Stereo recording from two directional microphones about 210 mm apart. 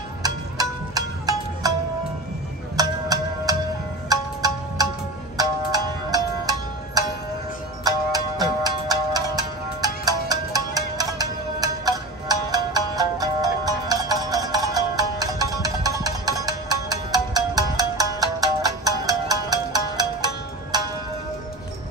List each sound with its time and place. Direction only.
0.2 s music: 20° right (ahead or behind)
2.8 s music: 15° right (ahead or behind)
7.8 s music: 20° right (ahead or behind)